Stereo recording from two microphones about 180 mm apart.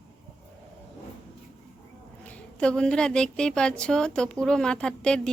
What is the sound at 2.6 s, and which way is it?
A woman's voice, 5° left (ahead or behind).